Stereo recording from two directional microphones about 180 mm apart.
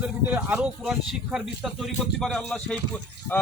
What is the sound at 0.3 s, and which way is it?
Speech, 10° right (ahead or behind).